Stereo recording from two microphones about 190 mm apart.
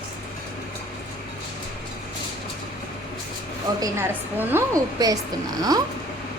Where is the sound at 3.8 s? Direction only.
10° right (ahead or behind).